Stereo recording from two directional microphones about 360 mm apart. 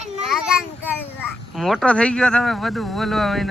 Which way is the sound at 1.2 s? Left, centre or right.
Centre.